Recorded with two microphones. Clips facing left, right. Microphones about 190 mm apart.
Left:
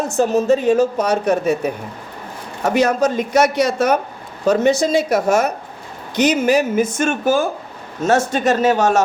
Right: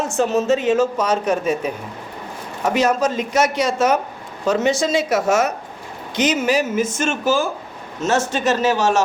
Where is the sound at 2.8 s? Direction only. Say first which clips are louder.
Left 3 dB; 60° left (ahead or behind).